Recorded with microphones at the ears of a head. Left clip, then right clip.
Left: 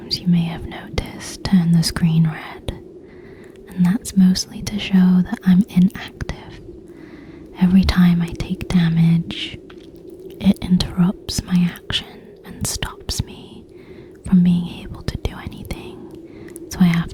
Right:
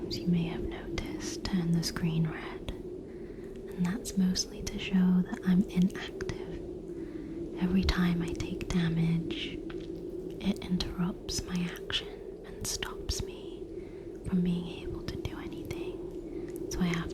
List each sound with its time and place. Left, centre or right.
0.1 s speech: left
3.8 s speech: left
7.6 s speech: left
14.3 s whispering: left
16.7 s whispering: left